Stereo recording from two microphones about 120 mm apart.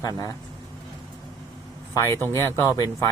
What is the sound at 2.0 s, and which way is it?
Speech, 20° left (ahead or behind).